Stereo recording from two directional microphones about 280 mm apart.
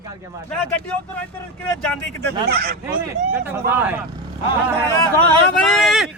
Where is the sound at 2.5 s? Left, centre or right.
Right.